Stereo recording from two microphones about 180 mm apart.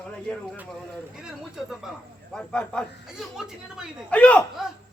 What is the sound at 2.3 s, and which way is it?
A man's voice, 5° left (ahead or behind).